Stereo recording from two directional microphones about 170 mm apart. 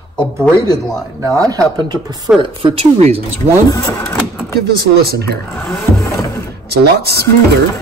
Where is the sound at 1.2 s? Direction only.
20° right (ahead or behind); by 3.2 s 35° right (ahead or behind).